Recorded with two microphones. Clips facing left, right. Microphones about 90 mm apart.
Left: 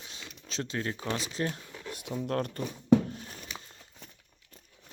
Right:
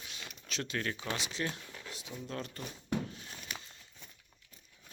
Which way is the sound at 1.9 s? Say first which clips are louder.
Left 10 dB; 55° left (ahead or behind).